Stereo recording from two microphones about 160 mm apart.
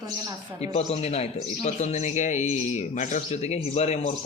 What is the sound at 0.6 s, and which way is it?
Speech, 40° left (ahead or behind).